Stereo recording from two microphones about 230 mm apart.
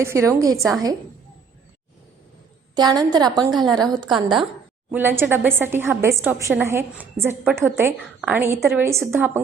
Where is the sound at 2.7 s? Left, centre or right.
Centre.